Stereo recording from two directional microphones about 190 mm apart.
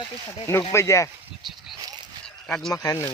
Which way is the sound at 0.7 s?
15° left (ahead or behind).